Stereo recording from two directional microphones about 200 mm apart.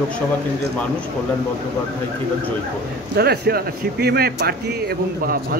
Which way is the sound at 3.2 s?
50° right (ahead or behind).